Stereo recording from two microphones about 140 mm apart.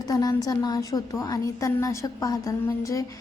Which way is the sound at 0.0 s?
25° left (ahead or behind).